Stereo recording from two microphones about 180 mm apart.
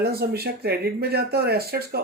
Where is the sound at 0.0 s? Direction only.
60° right (ahead or behind).